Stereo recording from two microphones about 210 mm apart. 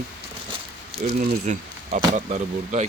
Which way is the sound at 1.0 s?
40° right (ahead or behind).